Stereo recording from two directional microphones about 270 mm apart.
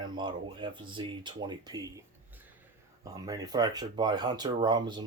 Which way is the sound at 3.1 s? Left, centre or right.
Centre.